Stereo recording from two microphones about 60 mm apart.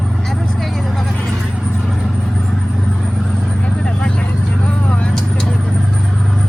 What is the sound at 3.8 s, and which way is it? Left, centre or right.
Vehicle, centre.